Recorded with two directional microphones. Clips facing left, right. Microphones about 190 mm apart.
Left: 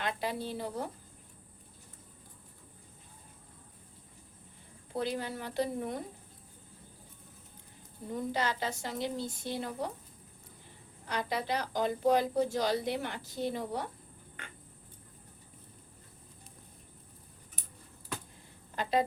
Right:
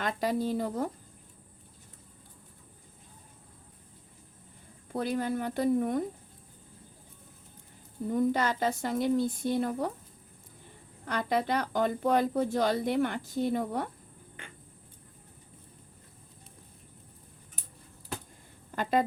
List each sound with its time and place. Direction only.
0.0 s speech: 45° right (ahead or behind)
4.9 s speech: 50° right (ahead or behind)
8.3 s speech: 50° right (ahead or behind)
11.0 s speech: 50° right (ahead or behind)
18.8 s speech: 50° right (ahead or behind)